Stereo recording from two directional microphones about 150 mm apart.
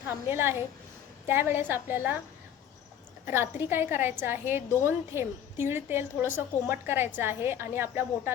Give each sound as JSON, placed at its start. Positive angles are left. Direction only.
{"t": 0.3, "sound": "a woman's voice", "side_deg": -15}
{"t": 3.2, "sound": "a woman's voice", "side_deg": -15}